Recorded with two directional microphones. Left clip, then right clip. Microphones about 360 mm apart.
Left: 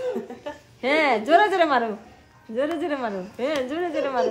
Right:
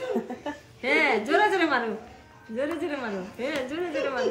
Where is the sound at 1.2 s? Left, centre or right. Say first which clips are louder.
Left 5 dB; left.